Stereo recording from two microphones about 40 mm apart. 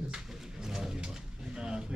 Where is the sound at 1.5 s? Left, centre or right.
Right.